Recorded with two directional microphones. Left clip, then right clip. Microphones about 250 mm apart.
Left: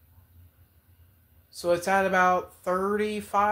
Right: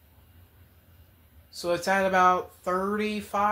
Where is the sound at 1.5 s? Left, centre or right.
Left.